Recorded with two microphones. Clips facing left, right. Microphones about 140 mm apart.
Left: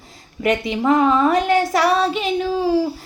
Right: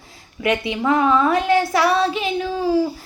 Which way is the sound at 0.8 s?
30° left (ahead or behind).